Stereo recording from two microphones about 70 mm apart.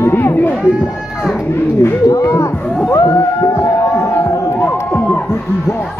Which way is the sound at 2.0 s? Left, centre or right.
Left.